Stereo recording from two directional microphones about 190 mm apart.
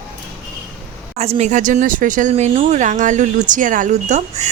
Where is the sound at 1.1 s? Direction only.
35° right (ahead or behind).